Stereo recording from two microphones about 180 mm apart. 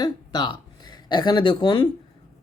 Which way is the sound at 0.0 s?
25° left (ahead or behind).